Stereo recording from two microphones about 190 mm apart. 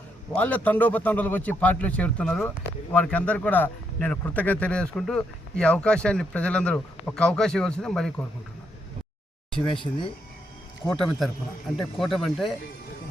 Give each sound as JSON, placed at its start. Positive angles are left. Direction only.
{"t": 0.3, "sound": "a man's voice", "side_deg": 10}
{"t": 9.7, "sound": "speech", "side_deg": 25}
{"t": 10.9, "sound": "speech", "side_deg": 0}